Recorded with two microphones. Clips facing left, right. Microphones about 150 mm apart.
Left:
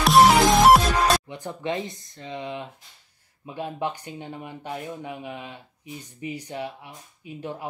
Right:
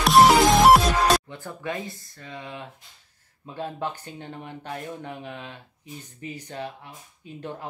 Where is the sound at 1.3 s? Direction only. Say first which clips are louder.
Left 3 dB; 20° left (ahead or behind).